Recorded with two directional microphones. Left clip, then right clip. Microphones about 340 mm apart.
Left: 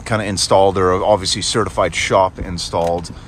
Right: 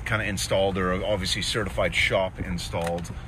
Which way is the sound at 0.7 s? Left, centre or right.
Left.